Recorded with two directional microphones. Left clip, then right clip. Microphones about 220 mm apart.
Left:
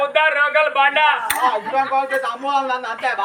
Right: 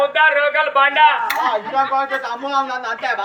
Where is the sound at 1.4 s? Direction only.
10° right (ahead or behind).